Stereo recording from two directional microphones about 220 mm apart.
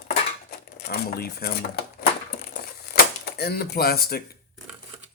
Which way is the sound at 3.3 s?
45° left (ahead or behind).